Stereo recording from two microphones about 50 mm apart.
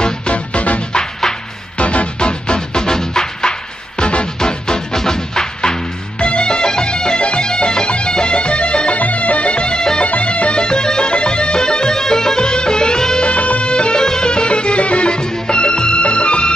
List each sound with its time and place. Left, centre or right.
0.0 s music: left
1.8 s music: left
10.0 s music: left
13.3 s music: left